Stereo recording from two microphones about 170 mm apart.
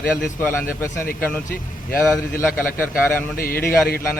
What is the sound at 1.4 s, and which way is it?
Speech, 60° left (ahead or behind).